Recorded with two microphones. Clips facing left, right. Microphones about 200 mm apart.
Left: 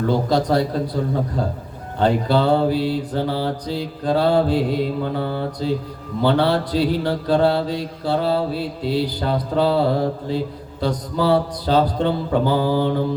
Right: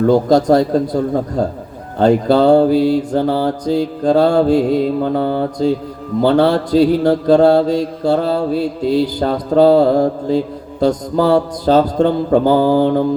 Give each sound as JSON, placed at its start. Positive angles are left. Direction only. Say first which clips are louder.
{"t": 0.1, "sound": "mantra", "louder": "right 7 dB", "side_deg": -45}
{"t": 1.4, "sound": "a man's voice", "louder": "right 6 dB", "side_deg": -40}
{"t": 2.0, "sound": "mantra", "louder": "right 7 dB", "side_deg": -45}